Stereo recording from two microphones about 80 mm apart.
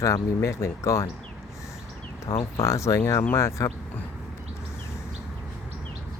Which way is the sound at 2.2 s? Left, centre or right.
Left.